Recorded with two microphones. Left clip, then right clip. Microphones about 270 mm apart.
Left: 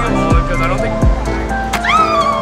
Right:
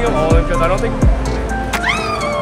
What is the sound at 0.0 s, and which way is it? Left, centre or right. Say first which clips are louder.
Music: right 1 dB; centre.